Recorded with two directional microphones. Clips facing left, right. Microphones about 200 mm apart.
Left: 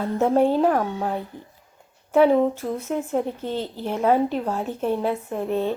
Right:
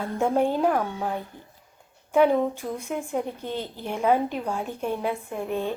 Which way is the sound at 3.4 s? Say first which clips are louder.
Left 4 dB; 35° left (ahead or behind).